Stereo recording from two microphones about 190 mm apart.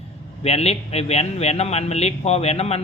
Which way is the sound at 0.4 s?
30° left (ahead or behind).